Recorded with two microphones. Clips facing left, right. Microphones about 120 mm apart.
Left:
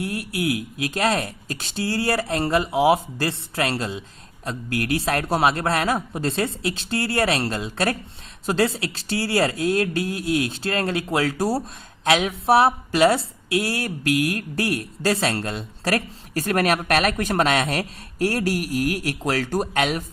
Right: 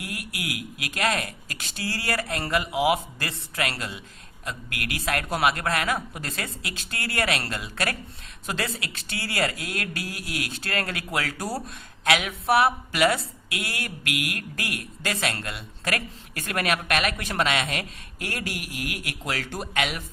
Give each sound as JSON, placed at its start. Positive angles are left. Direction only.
{"t": 0.0, "sound": "a woman's voice", "side_deg": 30}